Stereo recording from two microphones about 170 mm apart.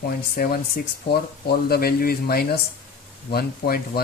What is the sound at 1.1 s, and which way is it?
Speech, 65° left (ahead or behind).